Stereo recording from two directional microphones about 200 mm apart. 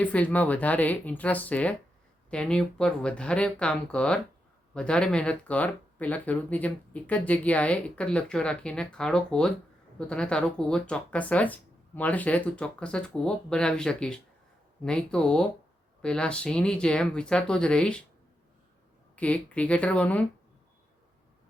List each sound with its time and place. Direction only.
0.0 s a woman's voice: 5° left (ahead or behind)
19.1 s a woman's voice: 5° left (ahead or behind)